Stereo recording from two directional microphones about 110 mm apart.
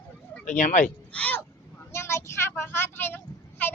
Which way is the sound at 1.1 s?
15° left (ahead or behind).